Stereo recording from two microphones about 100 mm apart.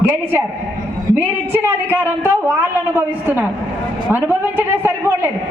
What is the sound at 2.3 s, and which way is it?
A man's voice, 20° right (ahead or behind).